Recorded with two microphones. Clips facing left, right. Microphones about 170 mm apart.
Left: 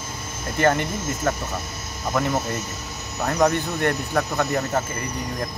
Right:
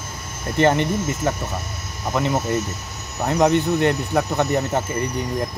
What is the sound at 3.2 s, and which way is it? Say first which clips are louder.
Speech: right 3 dB; 20° right (ahead or behind).